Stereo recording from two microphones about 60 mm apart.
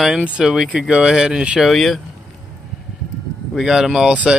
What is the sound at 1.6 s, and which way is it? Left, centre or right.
Speech, centre.